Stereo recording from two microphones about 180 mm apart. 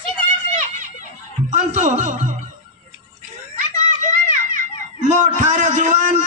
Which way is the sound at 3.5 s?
45° right (ahead or behind).